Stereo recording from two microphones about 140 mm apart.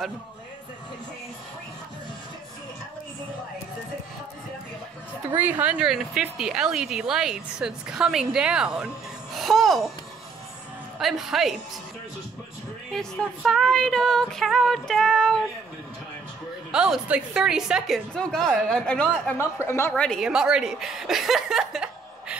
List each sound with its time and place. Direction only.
5.3 s speech: 10° right (ahead or behind)
11.0 s speech: centre (ahead or behind)
12.9 s speech: 5° left (ahead or behind)
16.7 s speech: 5° right (ahead or behind); by 19.9 s 20° left (ahead or behind)
19.9 s a woman's voice: 5° left (ahead or behind)